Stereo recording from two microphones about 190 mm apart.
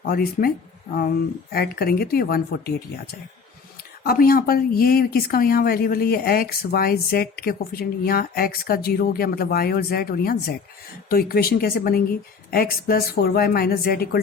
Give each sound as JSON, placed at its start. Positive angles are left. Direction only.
{"t": 0.0, "sound": "speech", "side_deg": 50}
{"t": 1.5, "sound": "speech", "side_deg": 55}
{"t": 4.0, "sound": "speech", "side_deg": 50}